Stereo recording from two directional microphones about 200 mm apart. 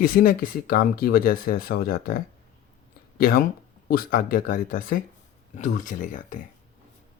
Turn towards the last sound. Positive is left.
turn(degrees=40)  # may be behind; listen again after turning